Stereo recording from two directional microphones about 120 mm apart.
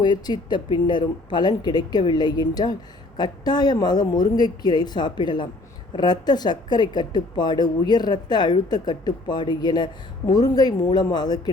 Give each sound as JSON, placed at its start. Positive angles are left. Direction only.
{"t": 0.0, "sound": "a woman's voice", "side_deg": 35}